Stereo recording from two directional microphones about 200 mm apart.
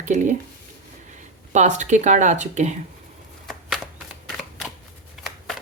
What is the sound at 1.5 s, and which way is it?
Speech, 35° right (ahead or behind).